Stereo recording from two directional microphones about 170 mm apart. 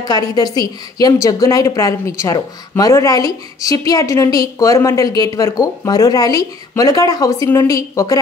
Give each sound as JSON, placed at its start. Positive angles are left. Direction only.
{"t": 0.0, "sound": "speech", "side_deg": 25}